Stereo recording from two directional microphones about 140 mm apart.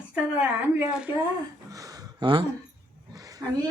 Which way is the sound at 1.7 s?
25° right (ahead or behind).